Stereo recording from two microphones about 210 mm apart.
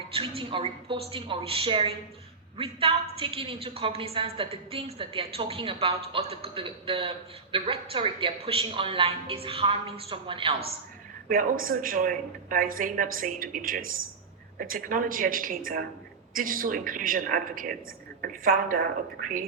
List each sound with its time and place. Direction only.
0.1 s a woman's voice: 25° right (ahead or behind)
11.3 s speech: 40° right (ahead or behind)